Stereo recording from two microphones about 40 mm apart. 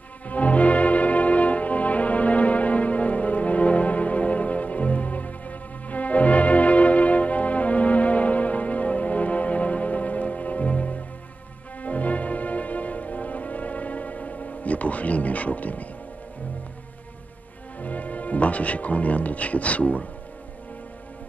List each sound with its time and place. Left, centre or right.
0.3 s music: left
17.7 s music: left